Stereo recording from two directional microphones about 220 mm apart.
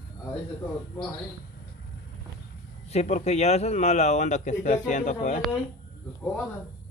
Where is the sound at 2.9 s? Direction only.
30° left (ahead or behind).